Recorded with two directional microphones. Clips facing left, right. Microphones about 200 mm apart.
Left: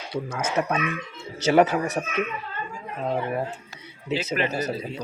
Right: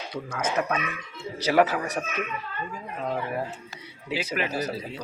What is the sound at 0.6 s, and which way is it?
Speech, 25° left (ahead or behind).